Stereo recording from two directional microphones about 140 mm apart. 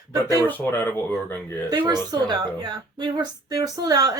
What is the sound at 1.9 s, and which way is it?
Speech, 30° right (ahead or behind).